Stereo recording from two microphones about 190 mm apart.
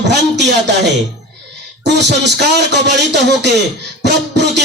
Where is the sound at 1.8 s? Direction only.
65° right (ahead or behind).